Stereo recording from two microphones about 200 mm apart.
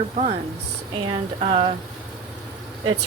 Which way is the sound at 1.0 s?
25° right (ahead or behind).